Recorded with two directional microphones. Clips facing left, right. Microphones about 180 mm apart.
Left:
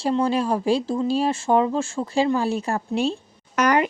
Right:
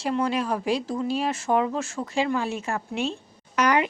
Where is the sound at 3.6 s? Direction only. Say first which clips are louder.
Left 2 dB; 45° left (ahead or behind).